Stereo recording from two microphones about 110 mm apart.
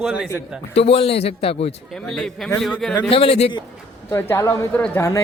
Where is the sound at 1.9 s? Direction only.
5° left (ahead or behind).